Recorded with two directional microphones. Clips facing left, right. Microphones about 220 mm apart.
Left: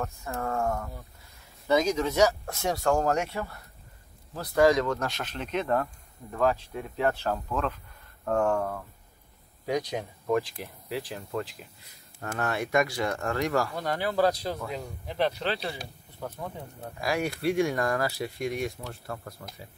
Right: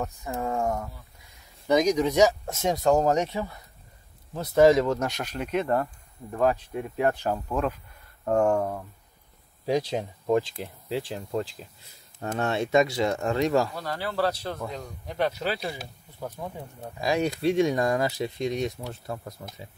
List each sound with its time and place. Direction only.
0.0 s speech: 15° right (ahead or behind)
9.7 s speech: 25° right (ahead or behind)
13.7 s speech: 15° left (ahead or behind)
15.0 s speech: centre (ahead or behind); by 19.6 s 20° right (ahead or behind)